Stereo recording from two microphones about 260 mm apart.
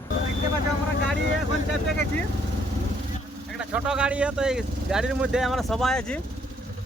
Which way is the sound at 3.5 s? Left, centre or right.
Centre.